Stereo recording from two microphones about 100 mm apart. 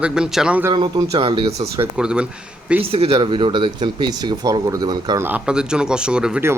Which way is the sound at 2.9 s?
80° right.